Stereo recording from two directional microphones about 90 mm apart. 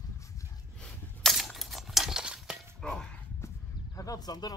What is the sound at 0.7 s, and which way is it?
Coin, 10° left (ahead or behind).